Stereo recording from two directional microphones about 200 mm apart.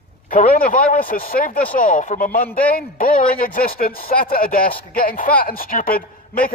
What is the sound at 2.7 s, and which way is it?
A man's voice, 45° left (ahead or behind).